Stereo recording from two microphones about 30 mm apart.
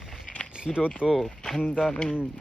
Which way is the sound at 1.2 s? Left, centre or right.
Left.